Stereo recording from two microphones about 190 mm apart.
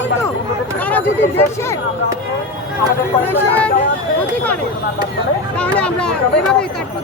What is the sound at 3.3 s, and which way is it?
Speech, 10° left (ahead or behind).